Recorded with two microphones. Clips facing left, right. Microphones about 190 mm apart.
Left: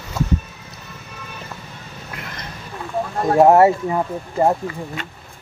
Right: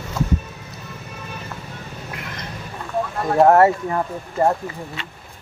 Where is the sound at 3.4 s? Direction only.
15° left (ahead or behind).